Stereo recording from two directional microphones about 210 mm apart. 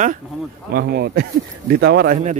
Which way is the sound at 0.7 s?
50° right (ahead or behind).